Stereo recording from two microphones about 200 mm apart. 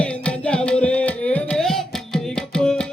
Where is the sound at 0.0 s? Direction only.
5° left (ahead or behind).